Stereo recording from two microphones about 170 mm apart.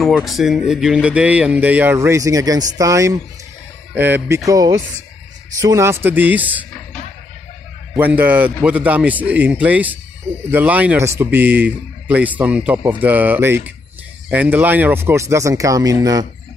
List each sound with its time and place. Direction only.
0.0 s speech: centre (ahead or behind)
7.9 s speech: 10° right (ahead or behind)